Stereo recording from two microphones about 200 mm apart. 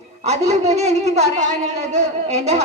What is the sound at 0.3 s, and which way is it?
Speech, 35° right (ahead or behind).